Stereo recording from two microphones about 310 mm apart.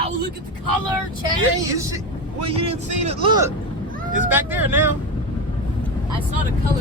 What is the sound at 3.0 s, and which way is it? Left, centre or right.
Speech, centre.